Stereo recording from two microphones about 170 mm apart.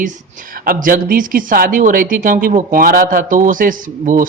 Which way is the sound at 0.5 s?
55° right (ahead or behind).